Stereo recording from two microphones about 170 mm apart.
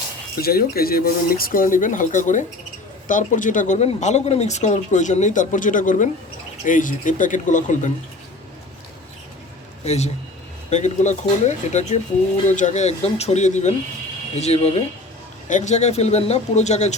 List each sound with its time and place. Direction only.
0.3 s speech: 65° left (ahead or behind); by 7.9 s 45° left (ahead or behind)
9.8 s a man's voice: 40° left (ahead or behind)